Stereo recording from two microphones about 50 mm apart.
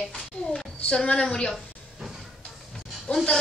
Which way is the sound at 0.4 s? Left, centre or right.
Left.